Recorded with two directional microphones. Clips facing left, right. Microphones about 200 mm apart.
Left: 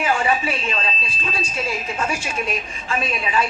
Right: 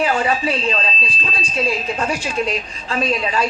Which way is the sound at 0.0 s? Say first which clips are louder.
Right 2 dB; 35° right (ahead or behind).